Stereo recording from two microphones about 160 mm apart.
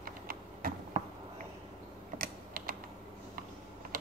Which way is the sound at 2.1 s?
65° right (ahead or behind).